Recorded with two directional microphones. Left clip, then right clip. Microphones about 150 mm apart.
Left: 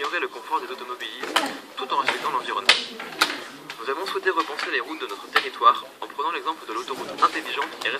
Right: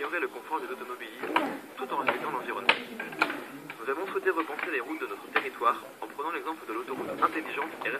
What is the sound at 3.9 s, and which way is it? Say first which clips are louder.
A man's voice: left 4 dB; 35° left (ahead or behind).